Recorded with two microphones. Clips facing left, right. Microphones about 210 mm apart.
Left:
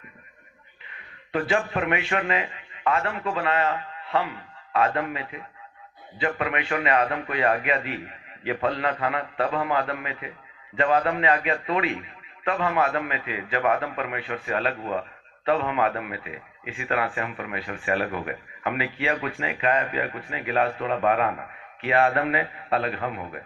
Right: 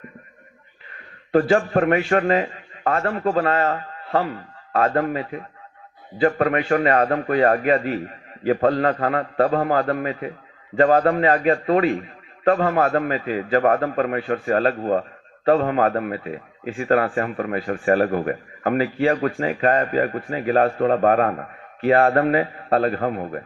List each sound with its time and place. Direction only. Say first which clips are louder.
0.9 s a man's voice: right 10 dB; 40° right (ahead or behind)